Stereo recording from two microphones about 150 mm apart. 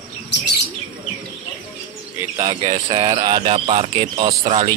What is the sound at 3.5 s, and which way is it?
Mantra, 40° right (ahead or behind).